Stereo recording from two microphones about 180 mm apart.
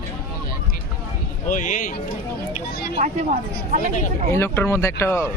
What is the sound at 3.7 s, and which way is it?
Speech, 50° right (ahead or behind).